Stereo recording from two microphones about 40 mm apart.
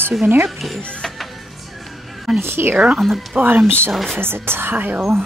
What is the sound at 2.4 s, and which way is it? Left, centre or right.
Speech, right.